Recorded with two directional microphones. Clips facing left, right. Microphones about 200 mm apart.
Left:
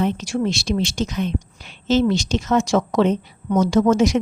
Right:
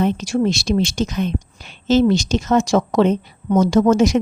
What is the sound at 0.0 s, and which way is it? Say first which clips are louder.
A woman's voice: right 3 dB; 40° right (ahead or behind).